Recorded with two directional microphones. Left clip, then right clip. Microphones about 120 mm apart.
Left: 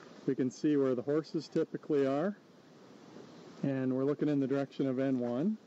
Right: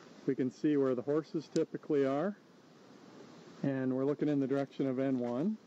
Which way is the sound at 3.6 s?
25° left (ahead or behind).